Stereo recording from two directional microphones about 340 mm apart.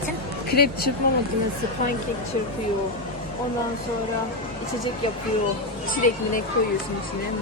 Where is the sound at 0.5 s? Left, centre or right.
Left.